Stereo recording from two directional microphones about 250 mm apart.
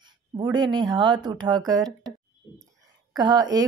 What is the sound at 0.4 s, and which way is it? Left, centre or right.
Speech, centre.